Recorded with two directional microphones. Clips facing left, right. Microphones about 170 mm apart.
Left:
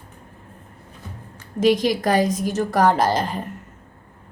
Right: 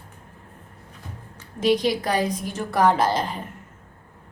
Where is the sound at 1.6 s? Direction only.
45° left (ahead or behind).